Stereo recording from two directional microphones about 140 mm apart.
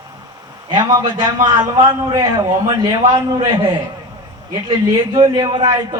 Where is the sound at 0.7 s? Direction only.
30° right (ahead or behind).